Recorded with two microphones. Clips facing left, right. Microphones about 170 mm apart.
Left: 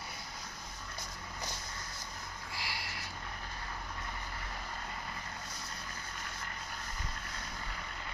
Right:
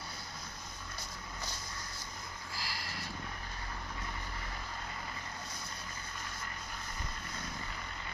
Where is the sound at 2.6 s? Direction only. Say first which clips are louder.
Even; 40° right (ahead or behind).